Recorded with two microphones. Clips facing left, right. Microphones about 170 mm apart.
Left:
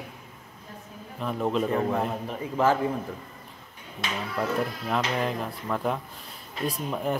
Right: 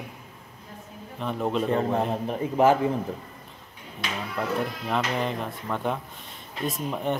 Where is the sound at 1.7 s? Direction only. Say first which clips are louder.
Right 2 dB; 30° right (ahead or behind).